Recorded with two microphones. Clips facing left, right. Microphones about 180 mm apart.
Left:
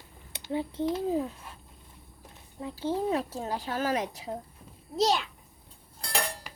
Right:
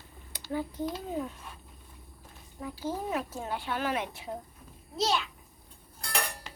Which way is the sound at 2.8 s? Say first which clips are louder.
Left 5 dB; 30° left (ahead or behind).